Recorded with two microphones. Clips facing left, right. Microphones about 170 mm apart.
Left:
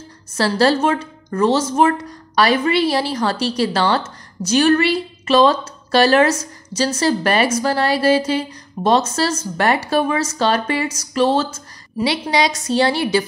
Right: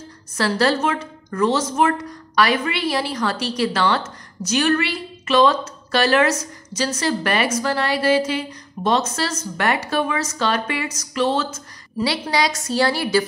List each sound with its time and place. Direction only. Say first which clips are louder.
0.4 s a woman's voice: left 3 dB; 30° left (ahead or behind)
12.0 s a woman's voice: left 3 dB; 20° left (ahead or behind)